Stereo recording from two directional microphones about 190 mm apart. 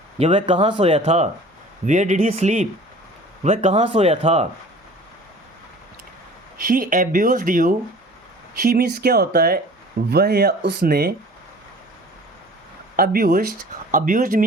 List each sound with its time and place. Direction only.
0.2 s speech: 30° right (ahead or behind)
6.7 s speech: 45° right (ahead or behind)
8.7 s speech: 55° right (ahead or behind)
13.0 s speech: 50° right (ahead or behind)